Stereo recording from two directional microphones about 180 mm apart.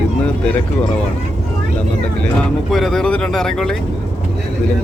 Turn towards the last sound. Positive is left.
turn(degrees=5)  # may be behind; listen again after turning